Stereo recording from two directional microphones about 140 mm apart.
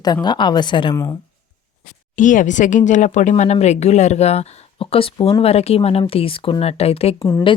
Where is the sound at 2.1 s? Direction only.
65° left (ahead or behind); by 7.2 s 45° left (ahead or behind).